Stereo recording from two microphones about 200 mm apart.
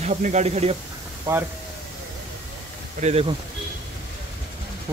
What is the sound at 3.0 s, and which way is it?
Speech, 30° right (ahead or behind).